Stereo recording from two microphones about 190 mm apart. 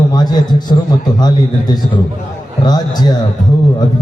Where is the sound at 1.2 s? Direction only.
20° left (ahead or behind).